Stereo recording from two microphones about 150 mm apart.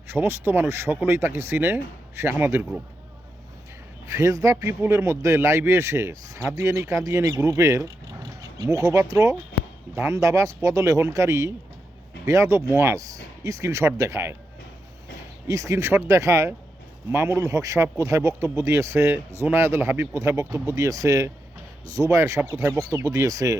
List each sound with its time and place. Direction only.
0.1 s speech: 15° right (ahead or behind)
4.0 s speech: 20° right (ahead or behind)
15.4 s speech: 20° right (ahead or behind)